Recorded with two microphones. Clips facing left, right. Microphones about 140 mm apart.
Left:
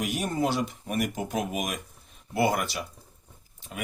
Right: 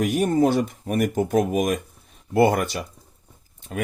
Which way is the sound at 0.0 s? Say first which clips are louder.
Right 8 dB; 50° right (ahead or behind).